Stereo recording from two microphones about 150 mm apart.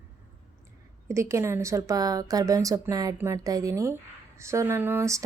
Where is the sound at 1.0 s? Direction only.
20° right (ahead or behind).